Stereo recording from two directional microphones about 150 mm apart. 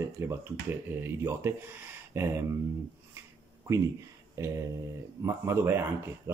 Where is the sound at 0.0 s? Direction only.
20° right (ahead or behind).